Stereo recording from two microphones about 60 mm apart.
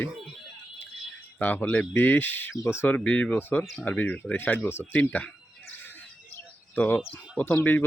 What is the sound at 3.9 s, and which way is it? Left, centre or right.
Speech, left.